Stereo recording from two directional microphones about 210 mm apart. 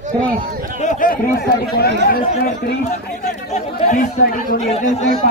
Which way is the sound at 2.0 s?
40° left (ahead or behind).